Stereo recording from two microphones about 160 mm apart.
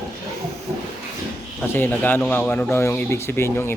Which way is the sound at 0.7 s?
20° right (ahead or behind).